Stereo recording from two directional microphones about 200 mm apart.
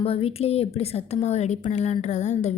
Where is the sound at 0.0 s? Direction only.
30° left (ahead or behind).